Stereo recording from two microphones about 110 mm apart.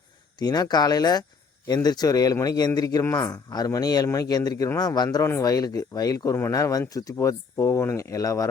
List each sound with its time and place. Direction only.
0.3 s speech: 40° left (ahead or behind)